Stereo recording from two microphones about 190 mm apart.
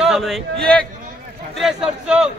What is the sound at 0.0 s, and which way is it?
Speech, centre (ahead or behind).